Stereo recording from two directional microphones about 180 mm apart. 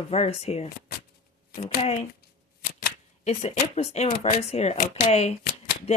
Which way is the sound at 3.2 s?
35° left (ahead or behind).